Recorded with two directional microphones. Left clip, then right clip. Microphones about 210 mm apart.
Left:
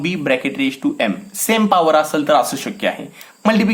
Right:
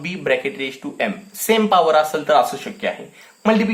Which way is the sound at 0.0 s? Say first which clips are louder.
Left 2 dB; 20° left (ahead or behind).